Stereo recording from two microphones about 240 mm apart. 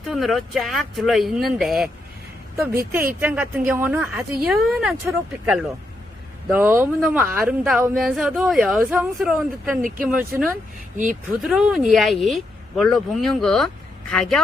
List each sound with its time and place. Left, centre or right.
0.0 s speech: centre
3.2 s speech: centre
10.9 s speech: right
11.4 s speech: centre